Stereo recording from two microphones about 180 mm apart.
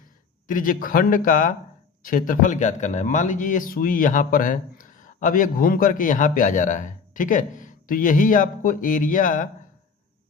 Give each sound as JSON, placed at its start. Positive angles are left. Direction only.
{"t": 0.4, "sound": "a man's voice", "side_deg": 50}